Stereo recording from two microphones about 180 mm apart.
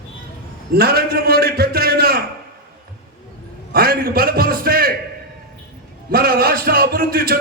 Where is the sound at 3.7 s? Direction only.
55° right (ahead or behind).